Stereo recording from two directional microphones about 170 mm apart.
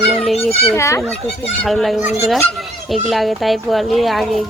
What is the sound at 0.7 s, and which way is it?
Speech, 15° left (ahead or behind).